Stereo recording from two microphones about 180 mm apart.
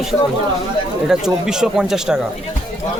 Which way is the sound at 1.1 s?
5° right (ahead or behind).